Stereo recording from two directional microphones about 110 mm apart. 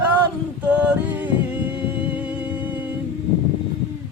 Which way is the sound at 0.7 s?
10° right (ahead or behind).